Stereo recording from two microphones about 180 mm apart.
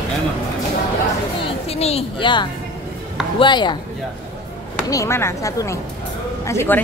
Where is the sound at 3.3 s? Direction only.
25° left (ahead or behind).